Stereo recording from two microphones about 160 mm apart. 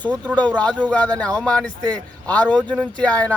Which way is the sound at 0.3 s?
10° left (ahead or behind).